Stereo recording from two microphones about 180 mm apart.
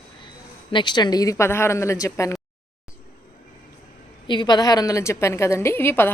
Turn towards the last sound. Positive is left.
turn(degrees=10)  # may be behind; listen again after turning